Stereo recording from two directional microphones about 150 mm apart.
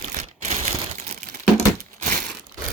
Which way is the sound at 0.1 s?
50° right (ahead or behind).